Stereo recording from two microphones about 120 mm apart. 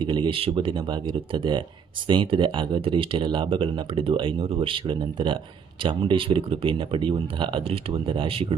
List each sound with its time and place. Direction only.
0.0 s speech: 40° right (ahead or behind)